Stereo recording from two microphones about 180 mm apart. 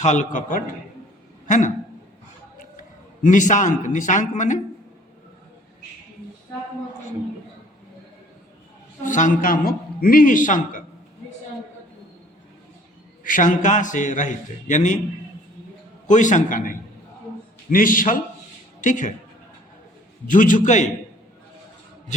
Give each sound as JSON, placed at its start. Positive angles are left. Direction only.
{"t": 0.0, "sound": "a man's voice", "side_deg": 40}
{"t": 3.2, "sound": "a man's voice", "side_deg": 45}
{"t": 9.0, "sound": "a man's voice", "side_deg": 45}
{"t": 13.2, "sound": "a man's voice", "side_deg": 45}
{"t": 16.0, "sound": "a man's voice", "side_deg": 45}
{"t": 20.2, "sound": "a man's voice", "side_deg": 45}